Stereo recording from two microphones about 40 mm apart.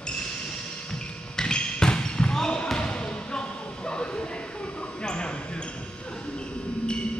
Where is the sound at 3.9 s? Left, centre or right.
Left.